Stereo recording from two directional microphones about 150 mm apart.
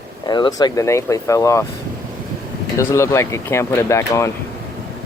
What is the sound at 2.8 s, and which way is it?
Speech, 20° left (ahead or behind).